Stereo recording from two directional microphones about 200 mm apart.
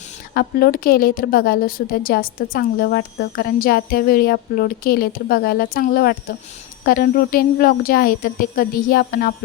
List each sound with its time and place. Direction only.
0.3 s a woman's voice: 50° left (ahead or behind)